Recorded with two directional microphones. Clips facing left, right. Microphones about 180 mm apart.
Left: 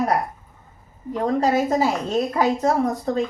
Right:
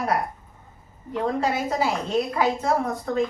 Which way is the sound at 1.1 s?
40° left (ahead or behind).